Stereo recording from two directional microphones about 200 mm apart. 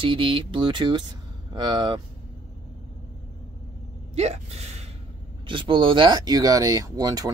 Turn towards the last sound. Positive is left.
turn(degrees=-20)  # may be behind; listen again after turning